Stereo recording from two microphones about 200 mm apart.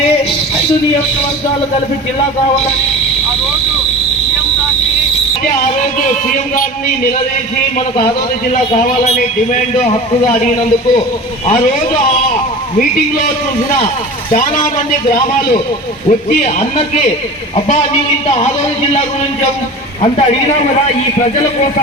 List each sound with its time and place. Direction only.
8.7 s speech: 35° left (ahead or behind)
14.3 s speech: 40° left (ahead or behind)
16.0 s speech: 35° left (ahead or behind)
18.3 s speech: 30° left (ahead or behind)